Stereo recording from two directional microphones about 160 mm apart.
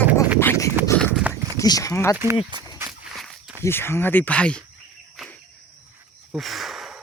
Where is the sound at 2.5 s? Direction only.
30° right (ahead or behind).